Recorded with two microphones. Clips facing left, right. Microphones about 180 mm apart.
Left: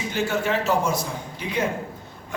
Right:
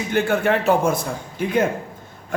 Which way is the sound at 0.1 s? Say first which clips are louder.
Right 5 dB; 55° right (ahead or behind).